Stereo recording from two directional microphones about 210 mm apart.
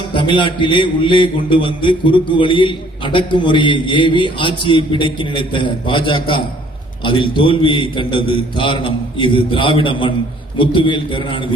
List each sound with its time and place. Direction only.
0.1 s a man's voice: 25° left (ahead or behind)